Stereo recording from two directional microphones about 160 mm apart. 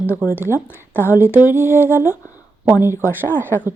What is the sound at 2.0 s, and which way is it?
Speech, 20° left (ahead or behind).